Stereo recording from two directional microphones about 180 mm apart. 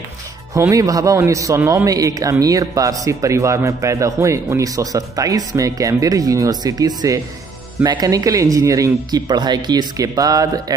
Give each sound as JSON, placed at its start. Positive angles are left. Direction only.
{"t": 0.6, "sound": "a man's voice", "side_deg": -20}